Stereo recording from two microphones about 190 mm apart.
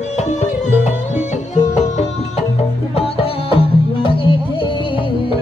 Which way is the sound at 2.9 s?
30° left (ahead or behind).